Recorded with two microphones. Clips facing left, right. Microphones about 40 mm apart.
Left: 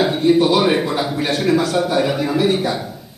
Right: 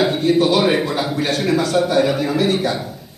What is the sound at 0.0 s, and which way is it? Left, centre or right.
A man's voice, centre.